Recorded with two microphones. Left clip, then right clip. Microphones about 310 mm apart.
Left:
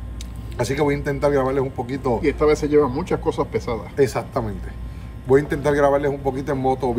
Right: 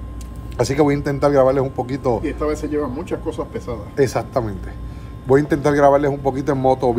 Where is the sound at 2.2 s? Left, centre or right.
Left.